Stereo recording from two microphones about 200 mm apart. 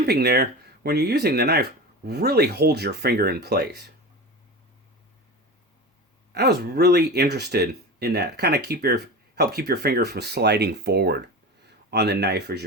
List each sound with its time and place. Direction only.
0.0 s speech: 55° right (ahead or behind)
6.3 s speech: 55° right (ahead or behind)